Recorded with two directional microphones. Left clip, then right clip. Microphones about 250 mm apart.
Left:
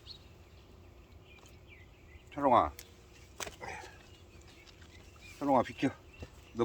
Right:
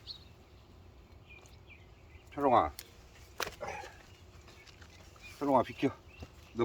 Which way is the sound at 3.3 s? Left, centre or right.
Centre.